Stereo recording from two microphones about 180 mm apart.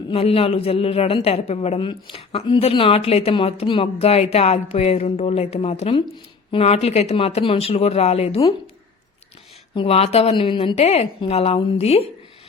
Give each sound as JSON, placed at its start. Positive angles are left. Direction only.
{"t": 0.1, "sound": "a man's voice", "side_deg": 30}
{"t": 9.7, "sound": "a man's voice", "side_deg": 35}